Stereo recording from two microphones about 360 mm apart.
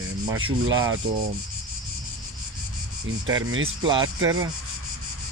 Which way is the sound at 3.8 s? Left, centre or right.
Centre.